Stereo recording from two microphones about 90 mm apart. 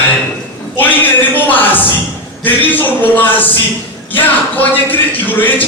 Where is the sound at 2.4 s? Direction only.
20° left (ahead or behind).